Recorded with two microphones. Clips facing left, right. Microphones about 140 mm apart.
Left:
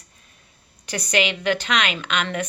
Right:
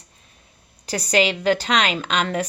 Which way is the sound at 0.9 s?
35° right (ahead or behind).